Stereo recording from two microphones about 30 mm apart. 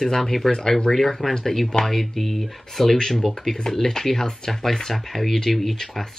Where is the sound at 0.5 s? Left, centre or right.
Left.